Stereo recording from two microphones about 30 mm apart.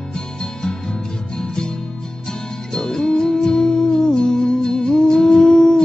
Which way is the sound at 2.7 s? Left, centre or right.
Left.